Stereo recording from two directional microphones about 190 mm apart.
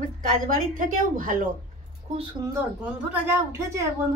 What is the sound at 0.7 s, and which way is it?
Speech, 45° right (ahead or behind).